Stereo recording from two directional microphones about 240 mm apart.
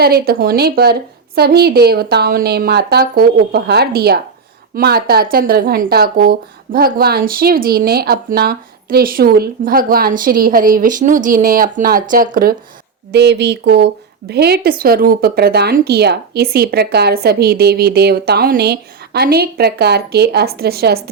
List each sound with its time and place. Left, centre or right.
0.0 s a woman's voice: right